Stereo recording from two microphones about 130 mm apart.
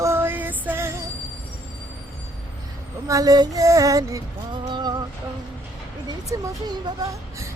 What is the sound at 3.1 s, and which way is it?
Speech, 25° right (ahead or behind).